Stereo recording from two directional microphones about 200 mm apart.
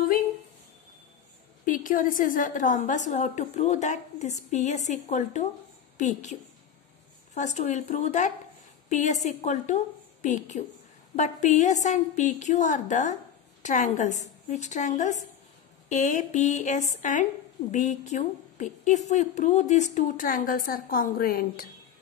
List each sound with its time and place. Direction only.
1.7 s speech: 45° left (ahead or behind)
7.3 s speech: 35° left (ahead or behind)